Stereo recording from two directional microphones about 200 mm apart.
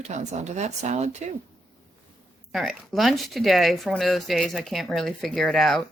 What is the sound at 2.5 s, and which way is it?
Speech, centre (ahead or behind).